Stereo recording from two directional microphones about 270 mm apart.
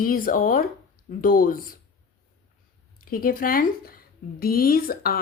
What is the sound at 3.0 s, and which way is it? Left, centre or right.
A woman's voice, left.